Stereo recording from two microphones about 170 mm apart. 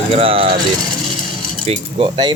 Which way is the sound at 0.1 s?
30° right (ahead or behind).